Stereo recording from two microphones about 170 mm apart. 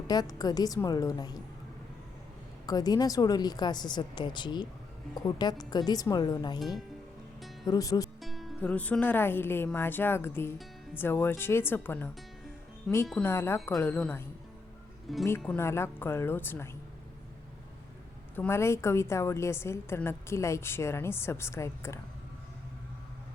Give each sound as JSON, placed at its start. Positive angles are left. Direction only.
{"t": 0.1, "sound": "speech", "side_deg": 20}
{"t": 2.6, "sound": "speech", "side_deg": 20}
{"t": 6.6, "sound": "speech", "side_deg": 0}
{"t": 7.7, "sound": "speech", "side_deg": 20}
{"t": 8.2, "sound": "a woman's voice", "side_deg": 0}
{"t": 13.3, "sound": "a woman's voice", "side_deg": 15}
{"t": 15.4, "sound": "a woman's voice", "side_deg": 10}
{"t": 18.3, "sound": "a woman's voice", "side_deg": 15}